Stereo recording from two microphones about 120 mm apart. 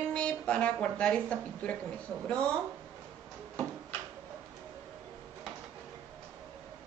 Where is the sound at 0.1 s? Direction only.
10° left (ahead or behind).